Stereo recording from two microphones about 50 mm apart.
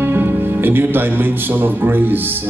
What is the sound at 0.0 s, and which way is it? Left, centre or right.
Speech, right.